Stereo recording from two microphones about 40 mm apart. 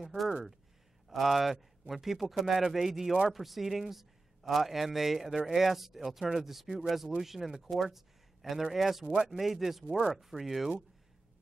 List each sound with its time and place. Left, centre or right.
1.0 s a man's voice: centre
9.0 s speech: right
9.4 s speech: centre
9.8 s speech: right
10.1 s speech: centre